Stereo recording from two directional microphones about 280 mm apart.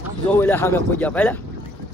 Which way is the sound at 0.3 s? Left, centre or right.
Centre.